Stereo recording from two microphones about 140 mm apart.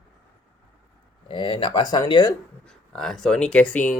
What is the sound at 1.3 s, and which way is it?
Speech, 35° left (ahead or behind).